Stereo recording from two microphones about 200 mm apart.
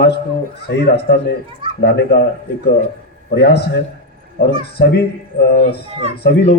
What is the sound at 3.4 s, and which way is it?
Speech, 55° left (ahead or behind).